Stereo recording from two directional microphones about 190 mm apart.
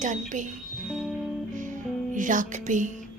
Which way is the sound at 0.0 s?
40° right (ahead or behind).